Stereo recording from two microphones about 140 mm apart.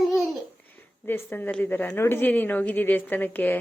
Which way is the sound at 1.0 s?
15° left (ahead or behind).